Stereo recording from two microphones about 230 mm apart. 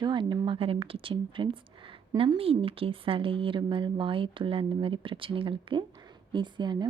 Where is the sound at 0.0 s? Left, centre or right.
Centre.